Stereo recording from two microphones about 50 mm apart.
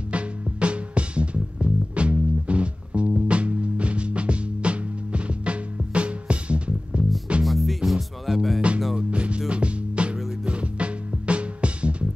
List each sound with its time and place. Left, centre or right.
0.1 s music: right
7.4 s music: centre
8.5 s music: right